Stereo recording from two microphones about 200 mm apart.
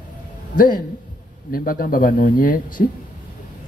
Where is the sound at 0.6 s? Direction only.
45° left (ahead or behind).